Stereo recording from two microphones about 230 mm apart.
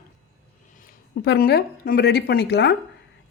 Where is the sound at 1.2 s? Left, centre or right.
Left.